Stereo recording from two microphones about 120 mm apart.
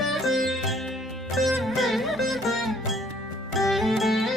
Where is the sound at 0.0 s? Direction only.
Centre (ahead or behind).